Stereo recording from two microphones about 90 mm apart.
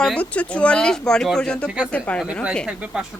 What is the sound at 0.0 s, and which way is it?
Speech, 10° left (ahead or behind).